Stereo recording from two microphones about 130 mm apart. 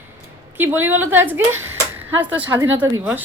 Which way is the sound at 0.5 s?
15° right (ahead or behind).